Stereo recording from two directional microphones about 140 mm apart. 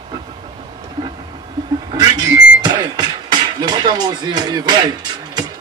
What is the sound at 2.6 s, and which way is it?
Speech, 30° right (ahead or behind).